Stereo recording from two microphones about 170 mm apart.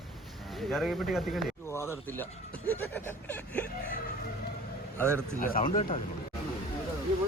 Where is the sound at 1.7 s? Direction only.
15° left (ahead or behind).